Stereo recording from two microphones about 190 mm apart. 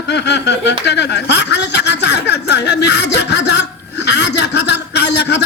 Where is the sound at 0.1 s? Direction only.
65° left (ahead or behind).